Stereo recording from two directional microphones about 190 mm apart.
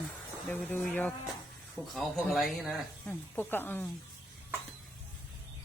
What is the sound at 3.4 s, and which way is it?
Speech, 10° left (ahead or behind).